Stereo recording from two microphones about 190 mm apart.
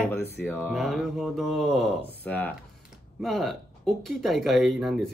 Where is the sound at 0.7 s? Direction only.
Centre (ahead or behind).